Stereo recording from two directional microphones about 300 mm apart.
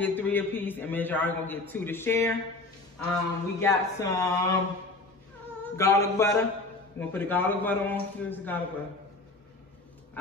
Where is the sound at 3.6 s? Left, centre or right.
Centre.